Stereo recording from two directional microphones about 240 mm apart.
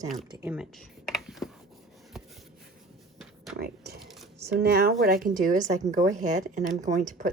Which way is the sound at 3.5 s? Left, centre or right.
Right.